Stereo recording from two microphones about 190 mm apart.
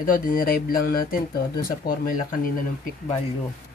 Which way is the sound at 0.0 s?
45° left (ahead or behind).